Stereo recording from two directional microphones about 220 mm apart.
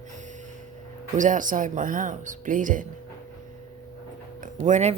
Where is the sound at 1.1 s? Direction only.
35° right (ahead or behind).